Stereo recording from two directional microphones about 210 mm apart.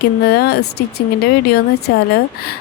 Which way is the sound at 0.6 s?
90° left.